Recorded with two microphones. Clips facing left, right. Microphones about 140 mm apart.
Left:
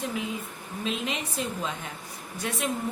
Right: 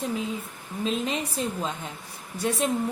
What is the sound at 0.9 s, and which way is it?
Speech, 35° right (ahead or behind).